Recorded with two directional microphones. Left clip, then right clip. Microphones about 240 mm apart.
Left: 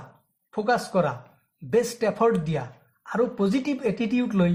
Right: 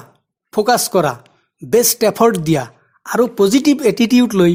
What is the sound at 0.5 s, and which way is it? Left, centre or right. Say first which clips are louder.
Speech: right 9 dB; right.